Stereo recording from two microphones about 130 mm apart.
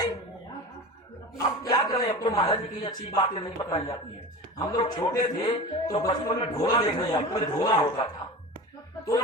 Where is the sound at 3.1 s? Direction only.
40° left (ahead or behind).